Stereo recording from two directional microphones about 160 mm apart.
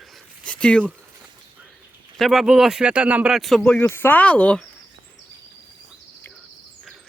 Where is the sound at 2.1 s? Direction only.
Centre (ahead or behind).